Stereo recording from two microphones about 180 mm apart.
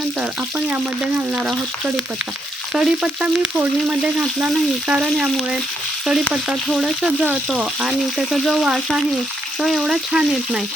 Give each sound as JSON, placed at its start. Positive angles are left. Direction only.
{"t": 0.2, "sound": "frying", "side_deg": -5}
{"t": 2.7, "sound": "frying", "side_deg": -5}